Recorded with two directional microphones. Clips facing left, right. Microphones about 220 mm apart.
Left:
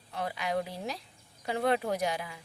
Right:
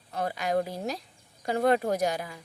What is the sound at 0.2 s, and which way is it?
A woman's voice, 45° right (ahead or behind).